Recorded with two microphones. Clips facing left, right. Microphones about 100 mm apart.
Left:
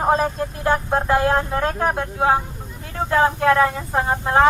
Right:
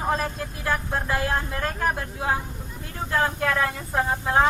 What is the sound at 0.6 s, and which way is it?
Speech, 60° left (ahead or behind).